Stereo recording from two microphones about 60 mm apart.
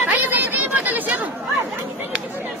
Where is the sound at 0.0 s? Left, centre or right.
Right.